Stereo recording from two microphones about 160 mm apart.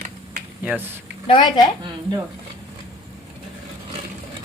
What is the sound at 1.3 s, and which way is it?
Speech, 30° left (ahead or behind).